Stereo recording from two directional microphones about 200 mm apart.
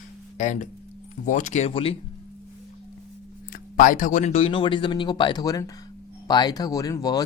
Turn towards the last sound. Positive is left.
turn(degrees=20)  # may be behind; listen again after turning